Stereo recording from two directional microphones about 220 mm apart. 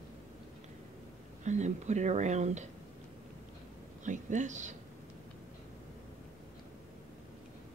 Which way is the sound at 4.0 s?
35° right (ahead or behind).